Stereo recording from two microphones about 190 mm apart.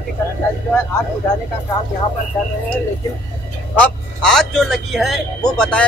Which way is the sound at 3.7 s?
5° left (ahead or behind).